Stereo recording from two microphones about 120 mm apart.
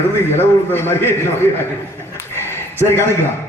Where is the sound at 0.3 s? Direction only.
20° left (ahead or behind).